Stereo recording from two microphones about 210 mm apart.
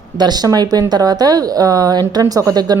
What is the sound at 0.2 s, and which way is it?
Speech, 20° right (ahead or behind).